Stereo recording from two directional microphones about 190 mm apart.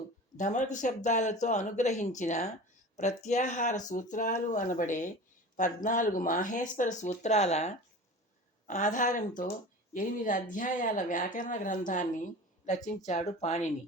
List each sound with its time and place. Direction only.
0.3 s speech: 40° left (ahead or behind)